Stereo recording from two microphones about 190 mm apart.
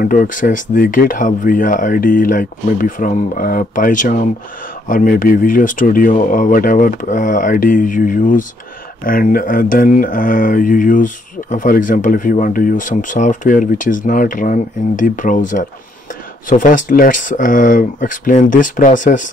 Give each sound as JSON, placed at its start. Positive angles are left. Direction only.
{"t": 0.0, "sound": "speech", "side_deg": 45}